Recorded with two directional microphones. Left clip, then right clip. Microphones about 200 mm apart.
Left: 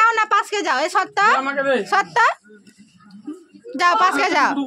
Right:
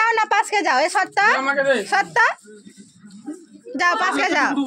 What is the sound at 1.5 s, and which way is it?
Speech, 20° left (ahead or behind).